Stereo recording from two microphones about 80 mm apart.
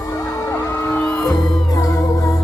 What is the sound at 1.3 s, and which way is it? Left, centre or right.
Music, left.